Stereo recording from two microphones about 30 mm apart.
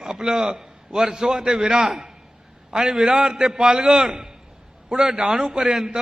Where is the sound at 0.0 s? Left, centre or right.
Right.